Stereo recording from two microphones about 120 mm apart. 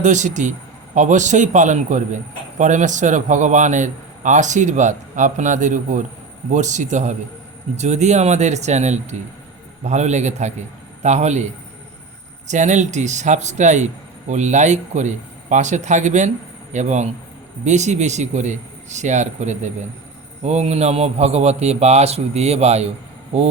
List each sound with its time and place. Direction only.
0.0 s a man's voice: 90° right; by 11.4 s 70° right (ahead or behind)
12.5 s a man's voice: 85° right
20.4 s a man's voice: 70° right (ahead or behind)